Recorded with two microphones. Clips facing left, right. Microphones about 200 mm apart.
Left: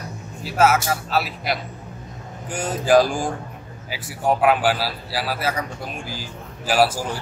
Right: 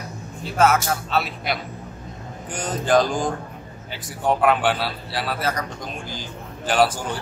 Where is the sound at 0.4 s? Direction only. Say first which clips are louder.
Even; 5° left (ahead or behind).